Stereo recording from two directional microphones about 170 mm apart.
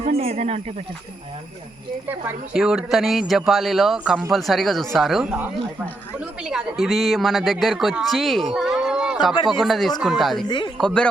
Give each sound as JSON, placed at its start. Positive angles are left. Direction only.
{"t": 0.2, "sound": "speech", "side_deg": -35}
{"t": 2.0, "sound": "a woman's voice", "side_deg": -5}